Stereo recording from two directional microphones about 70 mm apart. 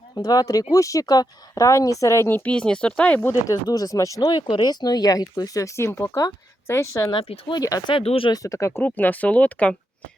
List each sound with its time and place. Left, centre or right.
0.1 s speech: left
2.2 s speech: left
2.5 s speech: centre
3.4 s speech: left
4.2 s speech: left
5.6 s speech: left
6.1 s a woman's voice: left
7.5 s speech: left
8.8 s speech: left